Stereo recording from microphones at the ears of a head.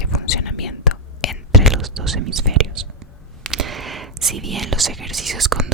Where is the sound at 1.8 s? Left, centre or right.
Right.